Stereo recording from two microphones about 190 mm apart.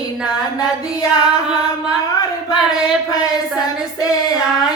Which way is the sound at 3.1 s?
20° left (ahead or behind).